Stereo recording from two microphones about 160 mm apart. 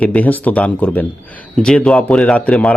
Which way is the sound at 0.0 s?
10° left (ahead or behind).